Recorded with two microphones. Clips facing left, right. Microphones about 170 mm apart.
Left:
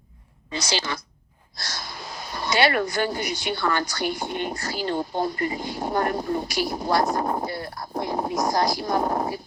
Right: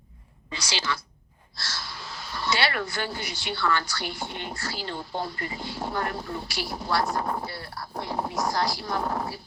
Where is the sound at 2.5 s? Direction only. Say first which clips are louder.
Left 6 dB; 45° left (ahead or behind).